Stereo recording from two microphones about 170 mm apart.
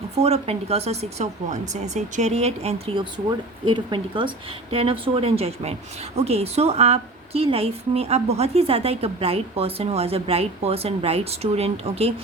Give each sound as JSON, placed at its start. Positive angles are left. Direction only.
{"t": 0.2, "sound": "a woman's voice", "side_deg": -40}